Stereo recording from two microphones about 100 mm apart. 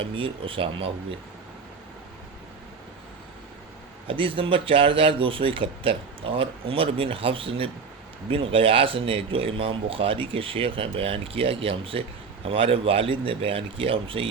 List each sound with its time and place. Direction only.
0.0 s speech: 60° right (ahead or behind)
4.0 s speech: 60° right (ahead or behind)